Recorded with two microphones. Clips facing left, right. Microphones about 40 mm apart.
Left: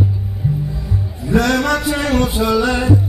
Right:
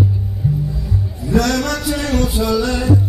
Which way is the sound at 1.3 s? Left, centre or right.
Left.